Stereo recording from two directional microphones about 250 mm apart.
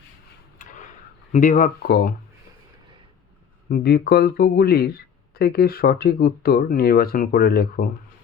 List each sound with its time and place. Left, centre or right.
0.6 s tick-tock: left
1.3 s speech: left
3.7 s speech: left